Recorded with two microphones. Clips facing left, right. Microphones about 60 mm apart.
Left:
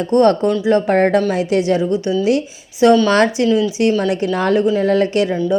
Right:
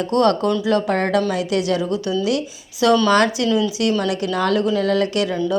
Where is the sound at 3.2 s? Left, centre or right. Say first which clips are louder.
Left 3 dB; left.